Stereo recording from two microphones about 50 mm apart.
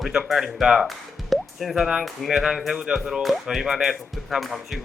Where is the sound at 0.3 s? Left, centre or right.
Centre.